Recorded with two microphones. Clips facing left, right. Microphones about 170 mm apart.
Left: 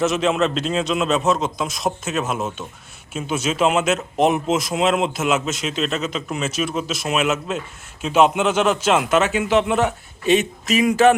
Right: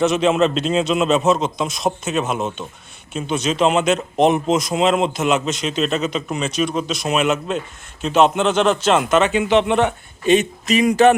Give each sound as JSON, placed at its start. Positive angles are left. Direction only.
{"t": 0.0, "sound": "a man's voice", "side_deg": 0}